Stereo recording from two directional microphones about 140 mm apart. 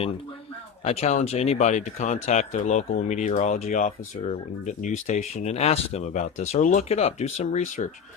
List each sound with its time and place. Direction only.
0.9 s speech: 50° left (ahead or behind)